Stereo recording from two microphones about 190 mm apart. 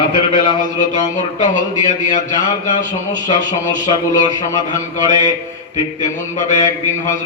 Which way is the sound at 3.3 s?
20° left (ahead or behind).